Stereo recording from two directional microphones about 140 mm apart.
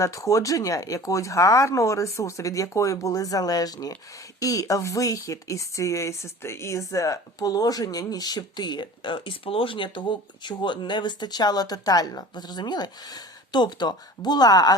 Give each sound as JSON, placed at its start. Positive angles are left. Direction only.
{"t": 0.0, "sound": "speech", "side_deg": 20}